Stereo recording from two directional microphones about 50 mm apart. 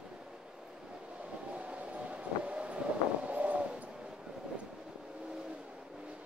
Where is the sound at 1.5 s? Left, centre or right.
Right.